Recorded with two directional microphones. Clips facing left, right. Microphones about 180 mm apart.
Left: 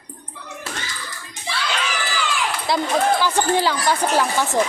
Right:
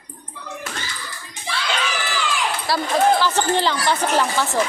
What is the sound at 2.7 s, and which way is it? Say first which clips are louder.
Speech: right 1 dB; 15° left (ahead or behind).